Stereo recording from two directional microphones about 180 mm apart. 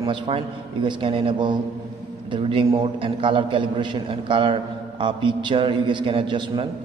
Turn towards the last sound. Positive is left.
turn(degrees=-25)  # may be behind; listen again after turning